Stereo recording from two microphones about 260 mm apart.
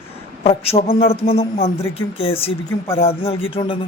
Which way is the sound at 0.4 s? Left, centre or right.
Left.